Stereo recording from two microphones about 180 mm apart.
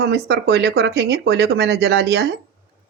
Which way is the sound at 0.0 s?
65° right (ahead or behind).